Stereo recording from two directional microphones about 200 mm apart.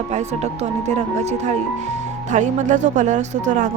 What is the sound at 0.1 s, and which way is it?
Speech, 35° right (ahead or behind).